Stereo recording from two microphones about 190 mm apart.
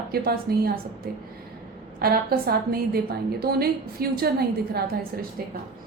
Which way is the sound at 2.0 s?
55° right (ahead or behind).